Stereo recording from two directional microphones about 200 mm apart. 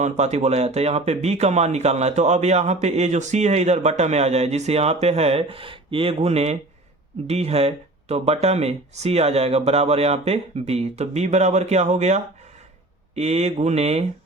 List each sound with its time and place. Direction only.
0.0 s speech: 35° right (ahead or behind)